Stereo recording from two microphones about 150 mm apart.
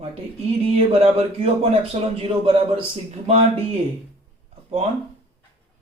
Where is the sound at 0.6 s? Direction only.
40° right (ahead or behind).